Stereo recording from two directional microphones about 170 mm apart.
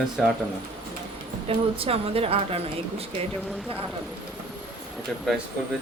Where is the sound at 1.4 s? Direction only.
35° right (ahead or behind).